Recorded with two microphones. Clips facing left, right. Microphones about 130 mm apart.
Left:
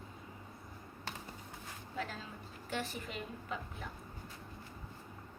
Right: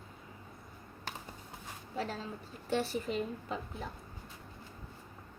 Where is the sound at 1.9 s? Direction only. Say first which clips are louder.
Right 5 dB; 30° right (ahead or behind).